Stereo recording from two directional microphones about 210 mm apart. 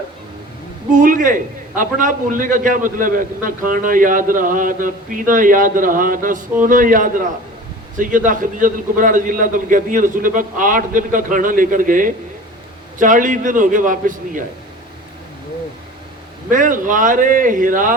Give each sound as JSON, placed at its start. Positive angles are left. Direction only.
{"t": 0.9, "sound": "a man's voice", "side_deg": -40}
{"t": 16.5, "sound": "a man's voice", "side_deg": -40}